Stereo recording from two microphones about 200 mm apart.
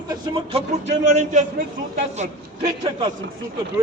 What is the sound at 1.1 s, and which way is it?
Speech, 35° right (ahead or behind).